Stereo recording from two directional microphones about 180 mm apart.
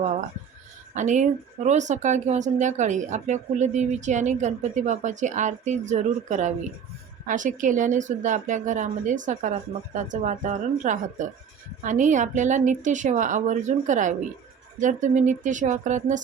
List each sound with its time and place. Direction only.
0.9 s a woman's voice: 40° right (ahead or behind)